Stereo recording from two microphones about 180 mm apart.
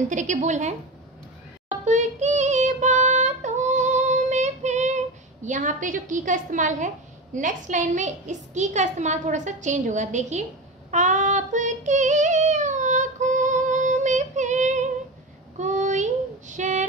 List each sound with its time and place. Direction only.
0.1 s a woman's voice: 40° right (ahead or behind)
1.7 s child singing: 40° right (ahead or behind)
7.3 s a woman's voice: 45° right (ahead or behind)
10.9 s female singing: 40° right (ahead or behind)
15.5 s child singing: 40° right (ahead or behind)